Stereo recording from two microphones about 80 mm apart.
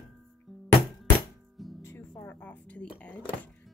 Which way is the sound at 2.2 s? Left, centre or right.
Left.